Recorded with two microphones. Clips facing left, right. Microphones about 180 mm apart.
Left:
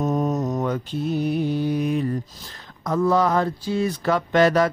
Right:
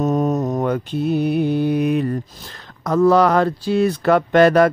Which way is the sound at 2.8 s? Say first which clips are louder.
Right 6 dB; 80° right.